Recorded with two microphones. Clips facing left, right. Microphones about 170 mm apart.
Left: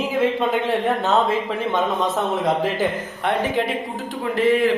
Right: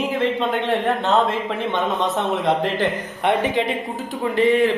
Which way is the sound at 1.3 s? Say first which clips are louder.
Left 1 dB; centre (ahead or behind).